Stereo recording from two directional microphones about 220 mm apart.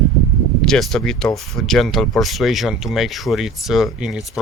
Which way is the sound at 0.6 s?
Centre (ahead or behind).